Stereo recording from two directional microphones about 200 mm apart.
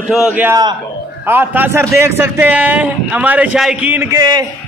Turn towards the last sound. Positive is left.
turn(degrees=-20)  # may be behind; listen again after turning